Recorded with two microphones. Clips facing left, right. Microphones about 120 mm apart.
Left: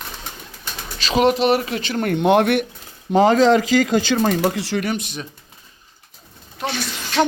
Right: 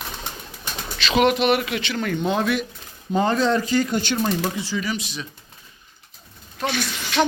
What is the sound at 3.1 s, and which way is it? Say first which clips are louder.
Speech: left 6 dB; 90° left.